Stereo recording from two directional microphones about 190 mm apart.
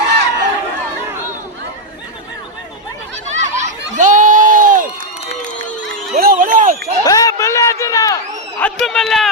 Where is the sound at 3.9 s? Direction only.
40° right (ahead or behind).